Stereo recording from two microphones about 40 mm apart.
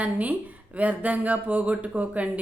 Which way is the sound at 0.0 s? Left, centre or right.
Right.